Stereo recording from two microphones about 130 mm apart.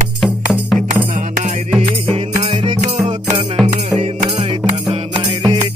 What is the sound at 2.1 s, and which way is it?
Music, 50° right (ahead or behind).